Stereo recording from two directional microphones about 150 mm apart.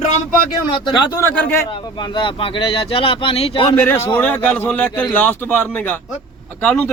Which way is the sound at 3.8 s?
15° left (ahead or behind).